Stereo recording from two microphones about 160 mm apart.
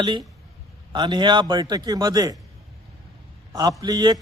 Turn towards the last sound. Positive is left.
turn(degrees=-25)  # may be behind; listen again after turning